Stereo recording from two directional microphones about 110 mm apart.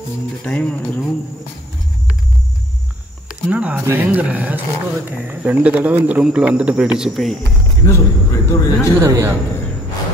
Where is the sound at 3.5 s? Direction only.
10° right (ahead or behind).